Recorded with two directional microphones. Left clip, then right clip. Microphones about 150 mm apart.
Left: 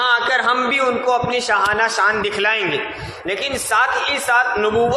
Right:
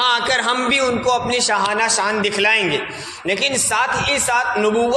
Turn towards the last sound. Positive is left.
turn(degrees=-30)  # may be behind; listen again after turning